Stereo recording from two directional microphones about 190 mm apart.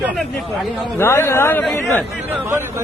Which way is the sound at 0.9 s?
15° left (ahead or behind).